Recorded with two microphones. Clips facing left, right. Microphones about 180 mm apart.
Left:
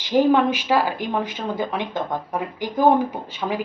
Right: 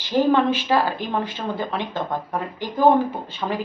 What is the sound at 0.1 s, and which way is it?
A woman's voice, 10° left (ahead or behind).